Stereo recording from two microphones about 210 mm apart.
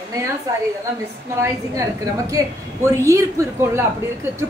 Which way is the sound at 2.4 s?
15° right (ahead or behind).